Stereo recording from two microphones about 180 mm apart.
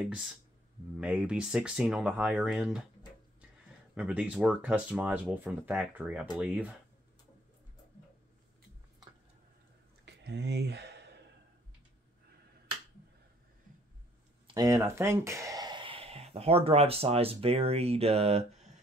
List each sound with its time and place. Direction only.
0.9 s speech: 5° right (ahead or behind)
3.9 s speech: 5° right (ahead or behind)
10.0 s a sound: 70° right (ahead or behind)
14.5 s speech: 20° right (ahead or behind); by 18.7 s 35° right (ahead or behind)